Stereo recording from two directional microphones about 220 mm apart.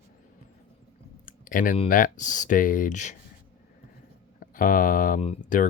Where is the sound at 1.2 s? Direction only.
40° left (ahead or behind).